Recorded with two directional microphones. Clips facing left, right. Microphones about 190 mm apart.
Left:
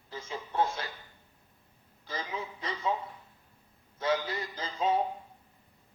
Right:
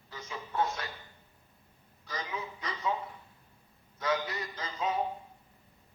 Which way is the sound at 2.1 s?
25° left (ahead or behind).